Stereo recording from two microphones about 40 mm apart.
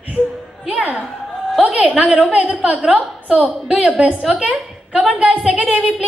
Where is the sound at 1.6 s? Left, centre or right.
Right.